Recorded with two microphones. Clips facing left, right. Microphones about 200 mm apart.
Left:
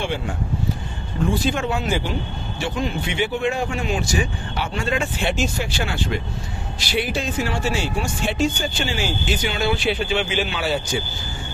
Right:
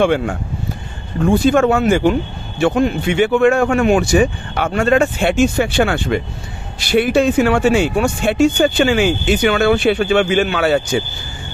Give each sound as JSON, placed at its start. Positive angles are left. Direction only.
{"t": 0.0, "sound": "speech", "side_deg": -60}
{"t": 1.6, "sound": "speech", "side_deg": -70}
{"t": 3.6, "sound": "speech", "side_deg": -65}
{"t": 5.0, "sound": "speech", "side_deg": -55}